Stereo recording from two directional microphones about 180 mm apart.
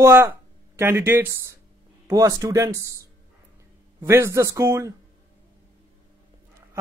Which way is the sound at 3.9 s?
15° right (ahead or behind).